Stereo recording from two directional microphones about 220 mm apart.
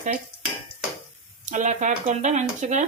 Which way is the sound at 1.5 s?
35° right (ahead or behind).